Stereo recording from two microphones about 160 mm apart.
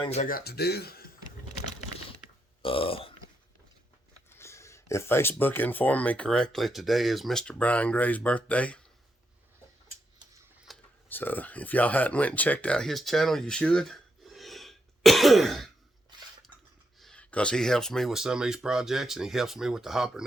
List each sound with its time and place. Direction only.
0.0 s speech: 40° left (ahead or behind)
0.3 s speech: 75° left (ahead or behind)
2.6 s speech: 35° left (ahead or behind)
4.3 s speech: 15° left (ahead or behind)
10.7 s a sound: centre (ahead or behind)
11.1 s speech: 10° left (ahead or behind)
16.1 s a sound: 30° right (ahead or behind)
17.0 s speech: 5° left (ahead or behind)